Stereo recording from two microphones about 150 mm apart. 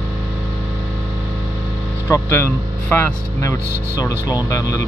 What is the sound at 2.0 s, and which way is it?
Speech, 20° left (ahead or behind).